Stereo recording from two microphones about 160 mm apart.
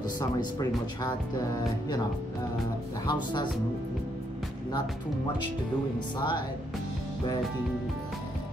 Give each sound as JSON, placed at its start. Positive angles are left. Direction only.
{"t": 0.4, "sound": "speech", "side_deg": 20}
{"t": 3.1, "sound": "speech", "side_deg": 30}
{"t": 6.1, "sound": "speech", "side_deg": 30}